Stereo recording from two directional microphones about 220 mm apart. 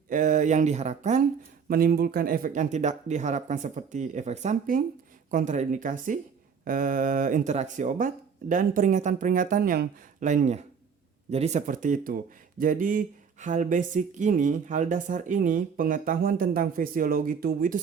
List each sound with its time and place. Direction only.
0.1 s speech: 35° right (ahead or behind)